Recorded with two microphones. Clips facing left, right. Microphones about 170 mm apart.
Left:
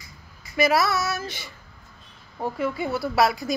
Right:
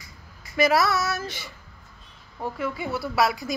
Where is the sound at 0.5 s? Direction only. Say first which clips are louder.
Even; 20° left (ahead or behind).